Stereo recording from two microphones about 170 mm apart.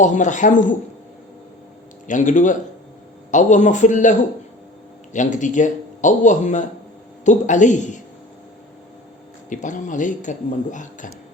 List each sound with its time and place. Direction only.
0.0 s speech: 45° left (ahead or behind)
2.0 s speech: 50° left (ahead or behind)
9.5 s speech: 50° left (ahead or behind)